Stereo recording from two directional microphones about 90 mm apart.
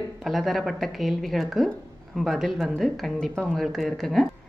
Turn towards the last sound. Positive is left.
turn(degrees=0)  # may be behind; listen again after turning